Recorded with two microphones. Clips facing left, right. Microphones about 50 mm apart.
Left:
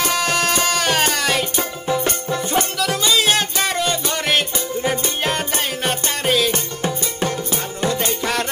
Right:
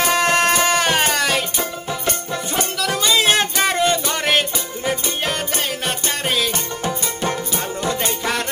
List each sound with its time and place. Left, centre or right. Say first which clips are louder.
0.2 s music: right 3 dB; right
0.6 s music: right 1 dB; centre
4.8 s music: even; centre